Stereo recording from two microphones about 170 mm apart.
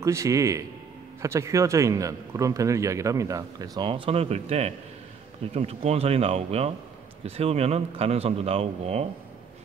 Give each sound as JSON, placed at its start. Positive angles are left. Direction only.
{"t": 0.0, "sound": "a man's voice", "side_deg": -20}